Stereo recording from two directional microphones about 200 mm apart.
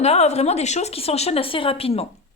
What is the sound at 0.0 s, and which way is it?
A woman's voice, 30° left (ahead or behind).